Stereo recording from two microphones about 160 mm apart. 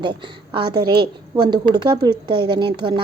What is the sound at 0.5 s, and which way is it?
Speech, 30° right (ahead or behind).